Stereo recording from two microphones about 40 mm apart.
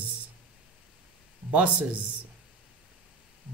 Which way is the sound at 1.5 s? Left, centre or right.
Right.